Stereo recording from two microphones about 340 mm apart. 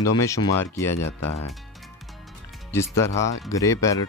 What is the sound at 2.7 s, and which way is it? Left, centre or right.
Speech, centre.